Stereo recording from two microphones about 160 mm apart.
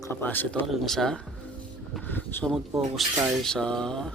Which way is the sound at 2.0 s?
10° left (ahead or behind).